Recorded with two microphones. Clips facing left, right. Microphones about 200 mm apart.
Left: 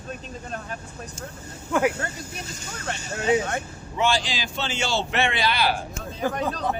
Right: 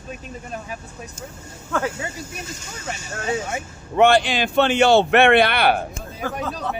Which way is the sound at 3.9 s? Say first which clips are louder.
Right 9 dB; 60° right (ahead or behind).